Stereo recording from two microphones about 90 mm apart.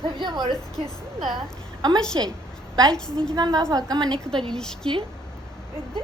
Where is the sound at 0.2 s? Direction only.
55° right (ahead or behind).